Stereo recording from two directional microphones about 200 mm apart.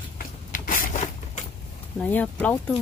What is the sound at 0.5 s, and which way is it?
Zipper, 45° left (ahead or behind).